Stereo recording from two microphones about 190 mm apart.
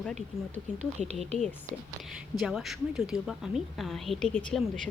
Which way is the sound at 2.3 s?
Centre (ahead or behind).